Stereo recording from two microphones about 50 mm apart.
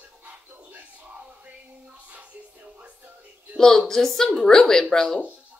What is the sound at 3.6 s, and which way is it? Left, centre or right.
Speech, centre.